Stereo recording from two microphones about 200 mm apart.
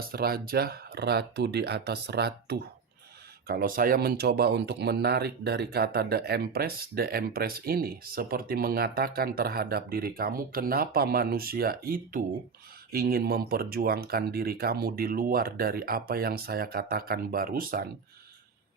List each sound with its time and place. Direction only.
0.0 s speech: 50° right (ahead or behind)